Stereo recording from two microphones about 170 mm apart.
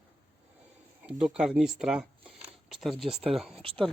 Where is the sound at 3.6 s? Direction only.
30° right (ahead or behind).